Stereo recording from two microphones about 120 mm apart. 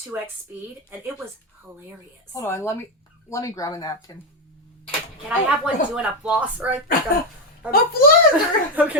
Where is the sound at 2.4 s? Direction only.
20° left (ahead or behind).